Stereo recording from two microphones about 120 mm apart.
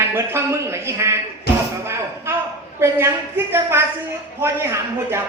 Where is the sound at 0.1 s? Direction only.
25° right (ahead or behind).